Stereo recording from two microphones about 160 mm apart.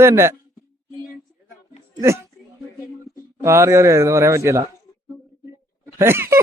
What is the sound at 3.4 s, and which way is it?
A man's voice, 15° right (ahead or behind).